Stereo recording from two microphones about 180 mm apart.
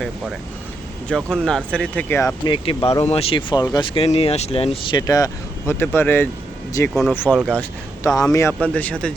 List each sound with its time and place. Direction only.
1.0 s speech: 5° left (ahead or behind)
2.4 s speech: 30° left (ahead or behind); by 9.1 s 5° left (ahead or behind)